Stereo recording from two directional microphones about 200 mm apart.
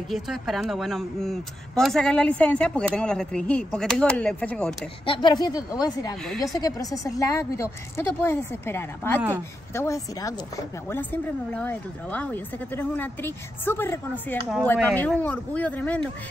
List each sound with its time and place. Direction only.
0.1 s speech: centre (ahead or behind)
5.0 s a woman's voice: 25° left (ahead or behind); by 16.1 s 10° left (ahead or behind)